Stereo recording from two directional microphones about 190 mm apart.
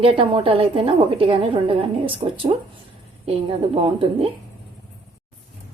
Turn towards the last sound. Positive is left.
turn(degrees=-30)  # may be behind; listen again after turning